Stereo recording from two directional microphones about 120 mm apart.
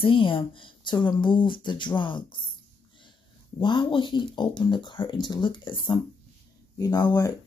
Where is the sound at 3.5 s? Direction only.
40° left (ahead or behind).